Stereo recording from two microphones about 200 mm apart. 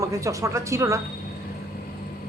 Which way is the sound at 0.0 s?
15° right (ahead or behind).